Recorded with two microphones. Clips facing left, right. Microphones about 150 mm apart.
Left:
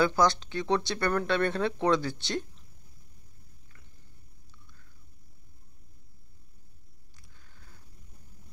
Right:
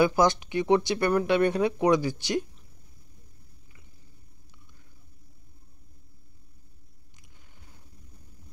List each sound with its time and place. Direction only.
0.0 s speech: 20° right (ahead or behind)